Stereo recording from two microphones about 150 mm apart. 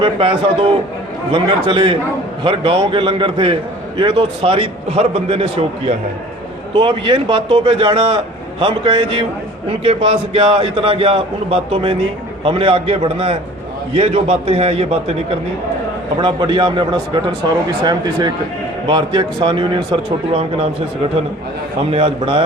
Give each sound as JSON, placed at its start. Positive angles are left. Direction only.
{"t": 0.0, "sound": "a man's voice", "side_deg": -40}
{"t": 16.2, "sound": "a man's voice", "side_deg": -30}
{"t": 21.8, "sound": "a man's voice", "side_deg": -40}